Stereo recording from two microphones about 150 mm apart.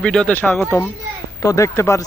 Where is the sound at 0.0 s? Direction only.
5° left (ahead or behind).